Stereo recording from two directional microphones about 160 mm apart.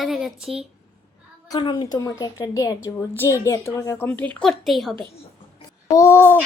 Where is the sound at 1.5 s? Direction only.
30° left (ahead or behind); by 4.9 s centre (ahead or behind).